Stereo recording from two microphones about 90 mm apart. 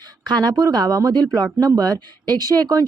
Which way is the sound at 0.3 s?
45° right (ahead or behind).